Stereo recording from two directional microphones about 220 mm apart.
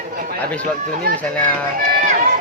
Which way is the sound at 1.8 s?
35° right (ahead or behind).